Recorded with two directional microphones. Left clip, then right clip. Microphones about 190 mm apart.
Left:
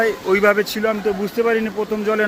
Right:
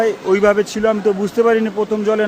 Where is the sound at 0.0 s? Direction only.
15° right (ahead or behind).